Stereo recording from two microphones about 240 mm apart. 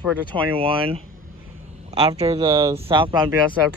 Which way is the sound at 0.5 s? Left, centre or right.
Right.